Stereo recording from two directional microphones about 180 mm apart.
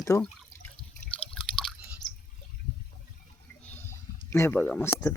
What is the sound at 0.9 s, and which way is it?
Liquid, 5° left (ahead or behind).